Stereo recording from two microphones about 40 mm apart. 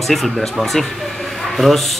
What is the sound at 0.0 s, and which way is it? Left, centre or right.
A man's voice, centre.